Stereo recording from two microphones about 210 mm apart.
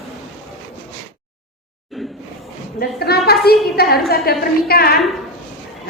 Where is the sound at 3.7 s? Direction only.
50° left (ahead or behind).